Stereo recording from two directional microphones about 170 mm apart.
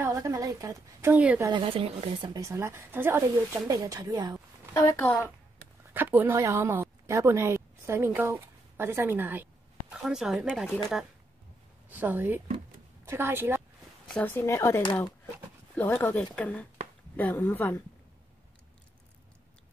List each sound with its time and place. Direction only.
0.0 s a woman's voice: 20° right (ahead or behind)
1.5 s speech: 30° right (ahead or behind)
4.7 s speech: 15° left (ahead or behind)
5.9 s a woman's voice: 10° right (ahead or behind)
11.9 s a woman's voice: 10° right (ahead or behind)
14.1 s speech: 10° left (ahead or behind)